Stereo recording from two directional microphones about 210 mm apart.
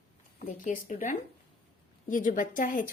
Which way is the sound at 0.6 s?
35° left (ahead or behind).